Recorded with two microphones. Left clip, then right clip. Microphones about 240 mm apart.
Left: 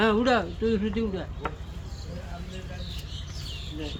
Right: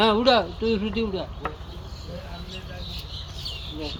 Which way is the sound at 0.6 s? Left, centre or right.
Centre.